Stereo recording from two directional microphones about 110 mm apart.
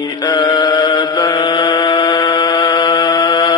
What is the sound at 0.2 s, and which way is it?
Chant, 35° left (ahead or behind).